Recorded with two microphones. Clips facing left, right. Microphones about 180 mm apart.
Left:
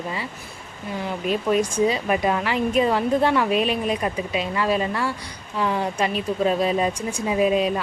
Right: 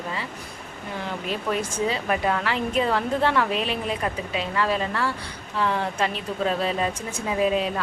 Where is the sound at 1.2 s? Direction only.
15° left (ahead or behind).